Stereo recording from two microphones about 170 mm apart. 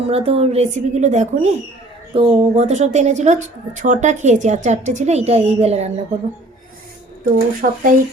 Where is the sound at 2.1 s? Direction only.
35° right (ahead or behind).